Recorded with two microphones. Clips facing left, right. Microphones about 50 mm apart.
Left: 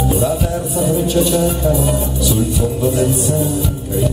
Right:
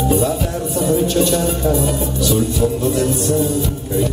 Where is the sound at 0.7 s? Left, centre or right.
Centre.